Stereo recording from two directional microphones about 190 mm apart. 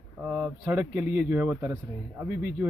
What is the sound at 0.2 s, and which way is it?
Speech, 5° right (ahead or behind).